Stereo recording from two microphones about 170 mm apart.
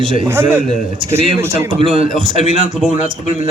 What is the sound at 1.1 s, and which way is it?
Speech, 15° right (ahead or behind).